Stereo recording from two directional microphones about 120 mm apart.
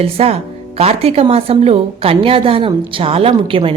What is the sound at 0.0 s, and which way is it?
A woman's voice, 55° right (ahead or behind).